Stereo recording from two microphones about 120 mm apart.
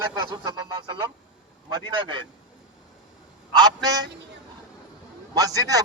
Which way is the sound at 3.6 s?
30° right (ahead or behind).